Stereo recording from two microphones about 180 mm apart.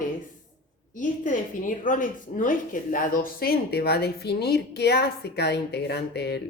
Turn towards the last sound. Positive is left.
turn(degrees=65)  # may be behind; listen again after turning